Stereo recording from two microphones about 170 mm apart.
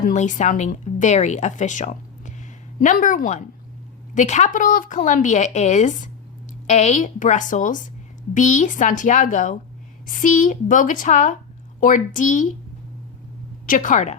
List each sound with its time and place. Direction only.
0.0 s speech: 45° left (ahead or behind)
13.7 s speech: 50° left (ahead or behind)